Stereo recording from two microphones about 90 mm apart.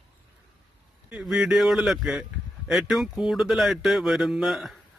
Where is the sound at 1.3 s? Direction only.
5° right (ahead or behind).